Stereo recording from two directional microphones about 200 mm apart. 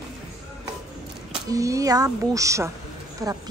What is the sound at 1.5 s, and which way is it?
Speech, 15° right (ahead or behind).